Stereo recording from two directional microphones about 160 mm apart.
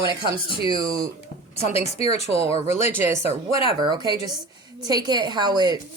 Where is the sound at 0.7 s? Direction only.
25° right (ahead or behind).